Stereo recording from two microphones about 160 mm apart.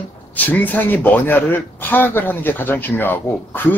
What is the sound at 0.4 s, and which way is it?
Speech, 10° left (ahead or behind).